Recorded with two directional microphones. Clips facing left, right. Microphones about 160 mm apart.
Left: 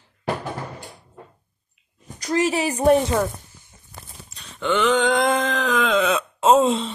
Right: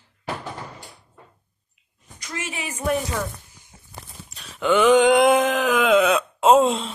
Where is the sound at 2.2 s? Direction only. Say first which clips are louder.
Left 12 dB; 35° left (ahead or behind).